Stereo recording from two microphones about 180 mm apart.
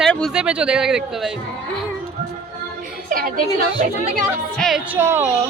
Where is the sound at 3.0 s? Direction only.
50° right (ahead or behind).